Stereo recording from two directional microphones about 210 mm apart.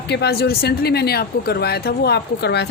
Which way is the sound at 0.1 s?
50° left (ahead or behind).